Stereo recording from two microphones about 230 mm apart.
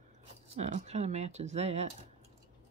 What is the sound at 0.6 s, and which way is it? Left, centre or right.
Speech, right.